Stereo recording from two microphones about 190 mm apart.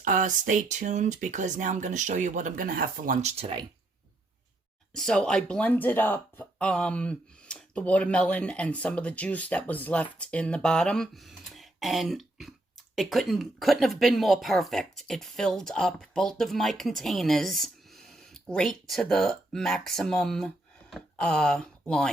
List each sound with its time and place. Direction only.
0.0 s speech: 40° right (ahead or behind)
4.9 s speech: 5° left (ahead or behind)